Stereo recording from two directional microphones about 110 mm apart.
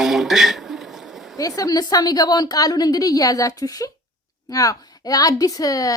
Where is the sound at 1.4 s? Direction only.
35° left (ahead or behind).